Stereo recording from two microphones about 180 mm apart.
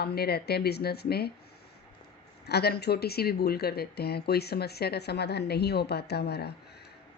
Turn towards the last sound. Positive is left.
turn(degrees=65)  # may be behind; listen again after turning